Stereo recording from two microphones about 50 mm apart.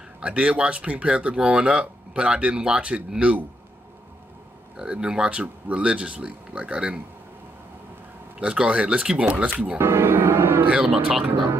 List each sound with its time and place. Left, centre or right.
0.2 s speech: right
4.7 s speech: centre
8.4 s speech: centre
9.8 s music: right
10.7 s speech: centre